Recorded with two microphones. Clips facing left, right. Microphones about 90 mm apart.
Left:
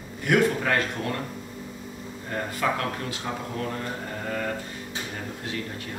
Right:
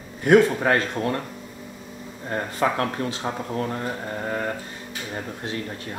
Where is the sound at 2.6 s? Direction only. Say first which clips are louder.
Right 3 dB; 35° right (ahead or behind).